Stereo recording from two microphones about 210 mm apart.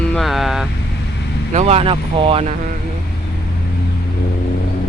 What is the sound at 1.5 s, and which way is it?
Speech, 30° right (ahead or behind).